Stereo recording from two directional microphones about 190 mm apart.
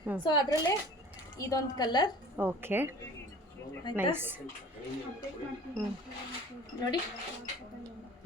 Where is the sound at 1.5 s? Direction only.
20° left (ahead or behind).